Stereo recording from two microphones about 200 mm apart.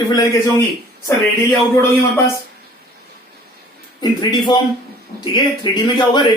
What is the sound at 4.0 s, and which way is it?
A man's voice, 20° left (ahead or behind).